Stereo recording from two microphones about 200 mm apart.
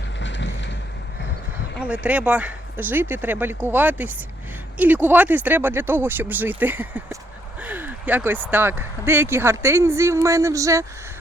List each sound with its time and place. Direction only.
0.2 s vehicle: 65° left (ahead or behind)
1.8 s speech: 5° right (ahead or behind)